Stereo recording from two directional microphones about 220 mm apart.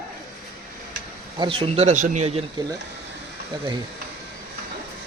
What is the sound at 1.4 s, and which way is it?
Speech, 25° right (ahead or behind).